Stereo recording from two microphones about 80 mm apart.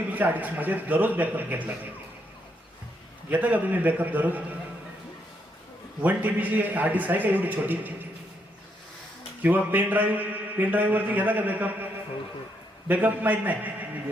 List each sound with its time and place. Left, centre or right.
0.1 s a man's voice: right
3.2 s a man's voice: centre
6.0 s a man's voice: right
9.4 s a man's voice: right
12.9 s a man's voice: right